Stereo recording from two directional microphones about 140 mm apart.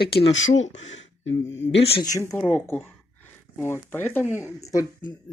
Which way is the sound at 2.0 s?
25° left (ahead or behind).